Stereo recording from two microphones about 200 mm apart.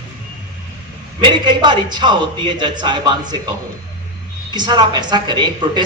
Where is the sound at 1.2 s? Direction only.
25° right (ahead or behind).